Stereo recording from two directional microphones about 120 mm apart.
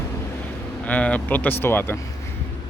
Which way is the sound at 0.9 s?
10° left (ahead or behind).